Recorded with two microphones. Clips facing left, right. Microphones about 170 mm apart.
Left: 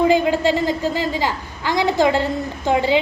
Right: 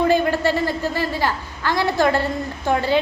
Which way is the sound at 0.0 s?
15° left (ahead or behind).